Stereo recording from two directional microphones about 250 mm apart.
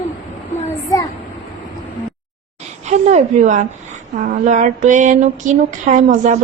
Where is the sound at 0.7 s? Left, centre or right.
Centre.